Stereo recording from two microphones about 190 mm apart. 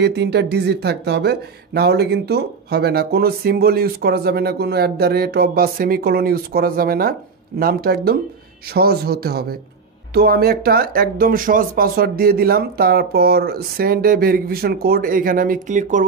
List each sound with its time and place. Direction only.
0.0 s speech: 65° right (ahead or behind); by 16.1 s 40° right (ahead or behind)